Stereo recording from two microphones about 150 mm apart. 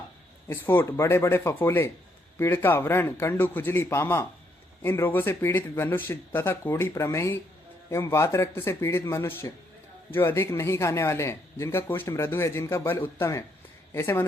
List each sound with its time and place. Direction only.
0.4 s speech: 15° left (ahead or behind)